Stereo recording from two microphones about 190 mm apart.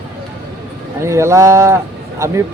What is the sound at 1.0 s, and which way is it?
Speech, 15° right (ahead or behind).